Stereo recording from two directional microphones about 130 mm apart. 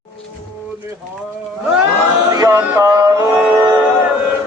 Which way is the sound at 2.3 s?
25° right (ahead or behind).